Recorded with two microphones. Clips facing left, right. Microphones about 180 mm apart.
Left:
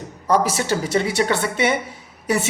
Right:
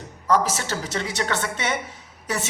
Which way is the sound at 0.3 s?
10° left (ahead or behind).